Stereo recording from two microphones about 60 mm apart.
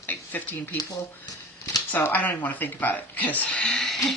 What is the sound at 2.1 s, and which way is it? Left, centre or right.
Speech, left.